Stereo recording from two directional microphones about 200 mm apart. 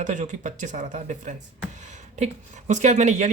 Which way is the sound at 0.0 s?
40° right (ahead or behind).